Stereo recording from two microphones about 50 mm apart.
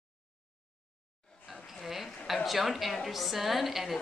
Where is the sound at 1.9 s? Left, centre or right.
Centre.